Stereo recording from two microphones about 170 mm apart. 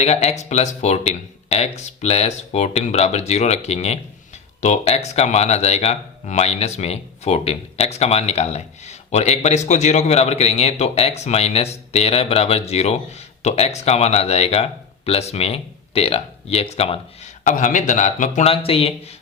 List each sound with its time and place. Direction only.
0.0 s speech: 40° left (ahead or behind)
17.4 s speech: 50° left (ahead or behind)